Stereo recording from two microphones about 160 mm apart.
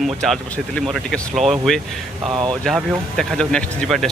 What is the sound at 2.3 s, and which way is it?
Speech, 30° right (ahead or behind).